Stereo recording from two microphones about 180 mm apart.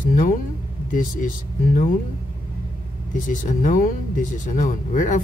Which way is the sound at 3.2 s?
45° left (ahead or behind).